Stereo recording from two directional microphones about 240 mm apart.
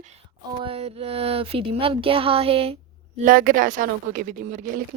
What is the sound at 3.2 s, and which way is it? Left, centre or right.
Speech, right.